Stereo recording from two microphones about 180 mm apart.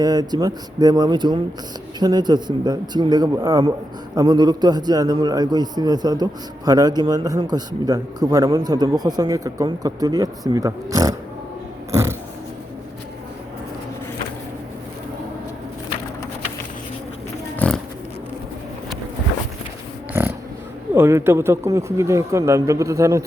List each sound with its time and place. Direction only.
0.0 s a man's voice: 20° right (ahead or behind)
17.6 s pig: 5° left (ahead or behind)
20.9 s speech: 15° right (ahead or behind)